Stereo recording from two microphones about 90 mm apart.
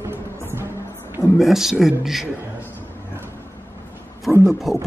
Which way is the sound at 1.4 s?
5° right (ahead or behind).